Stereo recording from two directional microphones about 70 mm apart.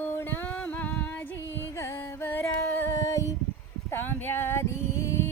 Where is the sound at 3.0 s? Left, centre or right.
Left.